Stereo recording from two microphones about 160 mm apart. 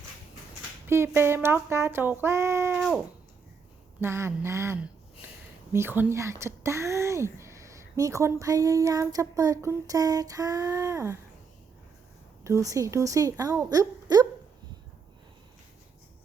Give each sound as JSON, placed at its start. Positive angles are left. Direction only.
{"t": 0.9, "sound": "speech", "side_deg": -15}
{"t": 4.0, "sound": "a woman's voice", "side_deg": -15}
{"t": 12.4, "sound": "a woman's voice", "side_deg": -20}